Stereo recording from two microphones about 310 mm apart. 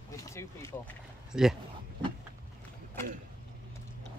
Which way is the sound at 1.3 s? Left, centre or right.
Centre.